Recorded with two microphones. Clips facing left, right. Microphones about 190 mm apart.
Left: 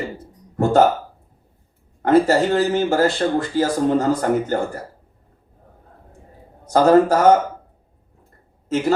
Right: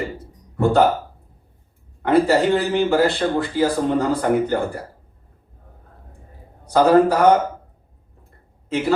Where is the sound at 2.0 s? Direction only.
45° left (ahead or behind).